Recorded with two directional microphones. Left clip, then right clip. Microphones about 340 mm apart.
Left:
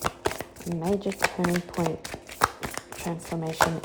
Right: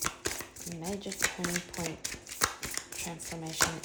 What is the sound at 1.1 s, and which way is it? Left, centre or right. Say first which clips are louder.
Speech: left 6 dB; centre.